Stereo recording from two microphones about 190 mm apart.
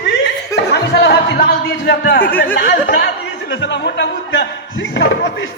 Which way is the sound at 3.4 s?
70° left (ahead or behind).